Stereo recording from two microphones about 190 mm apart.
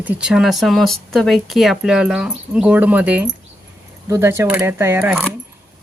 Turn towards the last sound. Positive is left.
turn(degrees=-10)  # may be behind; listen again after turning